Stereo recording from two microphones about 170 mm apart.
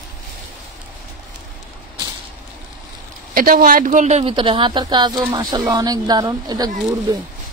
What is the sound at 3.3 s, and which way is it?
A woman's voice, 55° right (ahead or behind).